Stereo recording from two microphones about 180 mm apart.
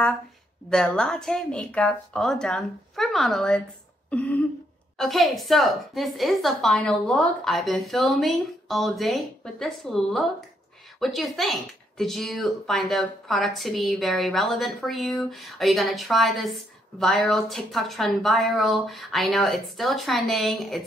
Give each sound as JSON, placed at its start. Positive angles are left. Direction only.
{"t": 0.7, "sound": "a woman's voice", "side_deg": 5}
{"t": 4.1, "sound": "throat clearing", "side_deg": 10}
{"t": 4.9, "sound": "a woman's voice", "side_deg": 0}